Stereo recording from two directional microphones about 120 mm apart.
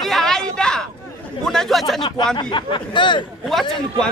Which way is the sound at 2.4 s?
40° left (ahead or behind).